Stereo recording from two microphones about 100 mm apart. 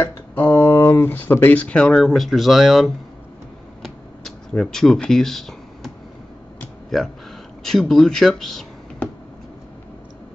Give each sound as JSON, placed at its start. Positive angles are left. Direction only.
{"t": 0.0, "sound": "speech", "side_deg": 20}
{"t": 3.8, "sound": "a sound", "side_deg": 5}
{"t": 6.9, "sound": "speech", "side_deg": 5}